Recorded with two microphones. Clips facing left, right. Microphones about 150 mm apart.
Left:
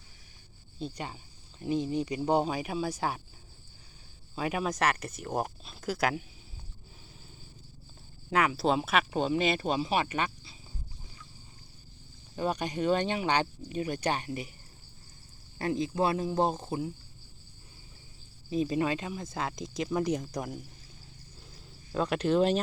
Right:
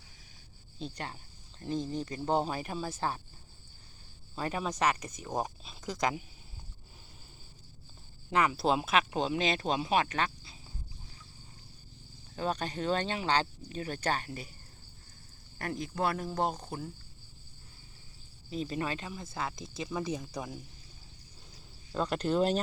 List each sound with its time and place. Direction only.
0.8 s speech: 5° left (ahead or behind)
4.4 s speech: 5° left (ahead or behind)
8.3 s speech: 5° left (ahead or behind)
12.4 s speech: 10° left (ahead or behind)
15.5 s speech: 25° left (ahead or behind)
18.5 s speech: 20° left (ahead or behind)
21.9 s speech: 5° left (ahead or behind)